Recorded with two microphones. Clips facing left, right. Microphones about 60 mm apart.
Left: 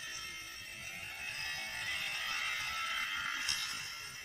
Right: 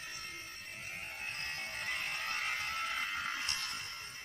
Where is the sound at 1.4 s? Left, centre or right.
Right.